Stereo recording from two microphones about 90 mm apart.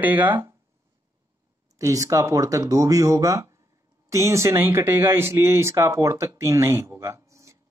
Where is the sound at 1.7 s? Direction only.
40° right (ahead or behind).